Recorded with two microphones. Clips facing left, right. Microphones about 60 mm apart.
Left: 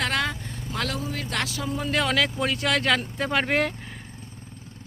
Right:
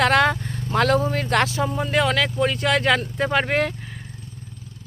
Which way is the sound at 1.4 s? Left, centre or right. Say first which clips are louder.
Right 8 dB; right.